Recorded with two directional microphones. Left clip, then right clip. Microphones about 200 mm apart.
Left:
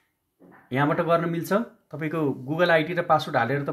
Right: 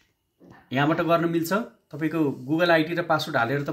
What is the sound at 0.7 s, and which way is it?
A man's voice, 35° left (ahead or behind).